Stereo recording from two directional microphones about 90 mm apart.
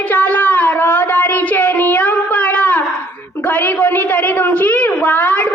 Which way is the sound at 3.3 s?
20° left (ahead or behind).